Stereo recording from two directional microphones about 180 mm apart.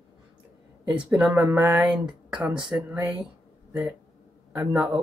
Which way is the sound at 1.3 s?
20° right (ahead or behind).